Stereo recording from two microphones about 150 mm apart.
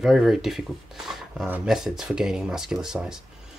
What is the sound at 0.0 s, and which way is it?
Speech, centre (ahead or behind).